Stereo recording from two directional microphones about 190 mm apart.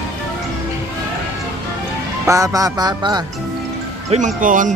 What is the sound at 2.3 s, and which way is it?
Speech, 15° right (ahead or behind).